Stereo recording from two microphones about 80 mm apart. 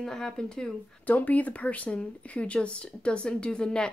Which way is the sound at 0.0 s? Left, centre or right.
Centre.